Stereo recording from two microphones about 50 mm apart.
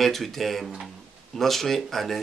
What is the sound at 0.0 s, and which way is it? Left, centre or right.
Speech, centre.